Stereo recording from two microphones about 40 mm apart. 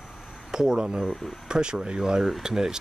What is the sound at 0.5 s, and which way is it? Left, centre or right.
Speech, centre.